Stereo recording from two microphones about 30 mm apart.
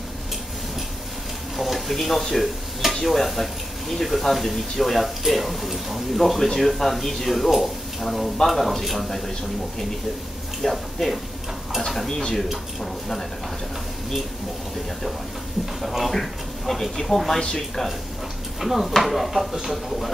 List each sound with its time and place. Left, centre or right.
1.6 s speech: centre
10.6 s speech: centre
12.1 s speech: left
15.8 s speech: centre
16.1 s speech: centre
18.6 s speech: centre